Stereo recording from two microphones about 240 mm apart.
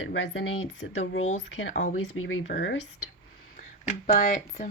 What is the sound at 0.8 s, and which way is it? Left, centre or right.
A woman's voice, left.